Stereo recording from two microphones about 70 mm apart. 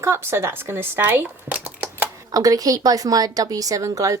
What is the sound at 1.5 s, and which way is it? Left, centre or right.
Dishes, centre.